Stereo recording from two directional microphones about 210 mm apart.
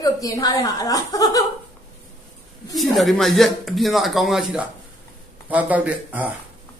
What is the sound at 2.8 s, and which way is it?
Speech, centre (ahead or behind).